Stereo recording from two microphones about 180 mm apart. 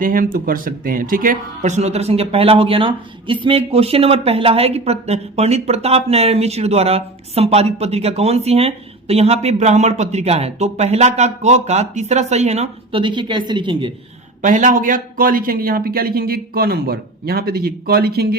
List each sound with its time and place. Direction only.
0.0 s speech: 50° right (ahead or behind); by 13.9 s 25° right (ahead or behind)
14.4 s a man's voice: 45° right (ahead or behind)